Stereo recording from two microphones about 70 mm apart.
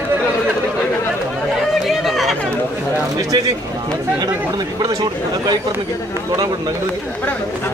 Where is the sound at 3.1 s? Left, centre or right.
Right.